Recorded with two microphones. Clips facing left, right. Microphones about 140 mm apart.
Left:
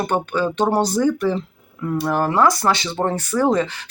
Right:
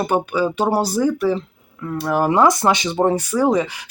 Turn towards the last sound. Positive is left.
turn(degrees=-10)  # may be behind; listen again after turning